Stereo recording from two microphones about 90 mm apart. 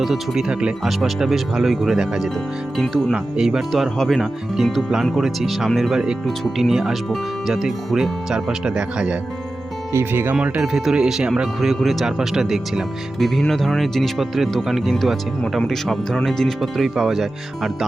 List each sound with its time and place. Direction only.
0.0 s speech: 5° right (ahead or behind)
9.9 s speech: 25° right (ahead or behind)
10.3 s speech: 10° right (ahead or behind)